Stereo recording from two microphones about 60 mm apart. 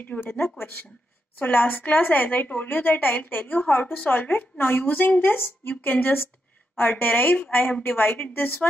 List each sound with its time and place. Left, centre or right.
0.0 s a woman's voice: left